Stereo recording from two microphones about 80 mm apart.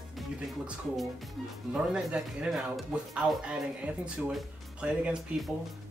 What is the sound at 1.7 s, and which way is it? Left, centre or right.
Speech, centre.